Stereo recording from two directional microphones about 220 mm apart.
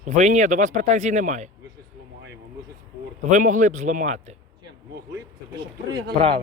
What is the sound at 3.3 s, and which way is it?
Speech, 35° right (ahead or behind).